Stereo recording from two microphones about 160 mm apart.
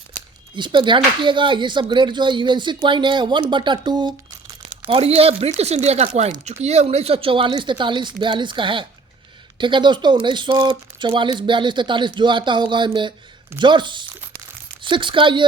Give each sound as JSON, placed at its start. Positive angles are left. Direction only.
{"t": 0.5, "sound": "speech", "side_deg": -30}